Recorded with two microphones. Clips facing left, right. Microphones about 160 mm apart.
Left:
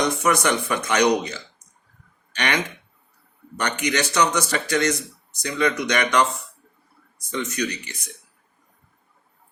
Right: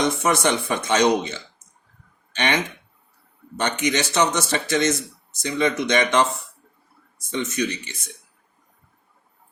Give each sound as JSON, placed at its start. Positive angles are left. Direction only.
{"t": 0.0, "sound": "speech", "side_deg": -25}
{"t": 3.6, "sound": "speech", "side_deg": -25}